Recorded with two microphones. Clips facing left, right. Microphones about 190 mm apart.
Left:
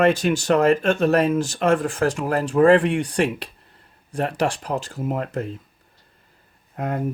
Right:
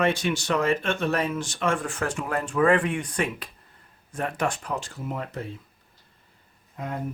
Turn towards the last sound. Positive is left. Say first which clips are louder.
# left 7 dB
turn(degrees=60)  # may be behind; listen again after turning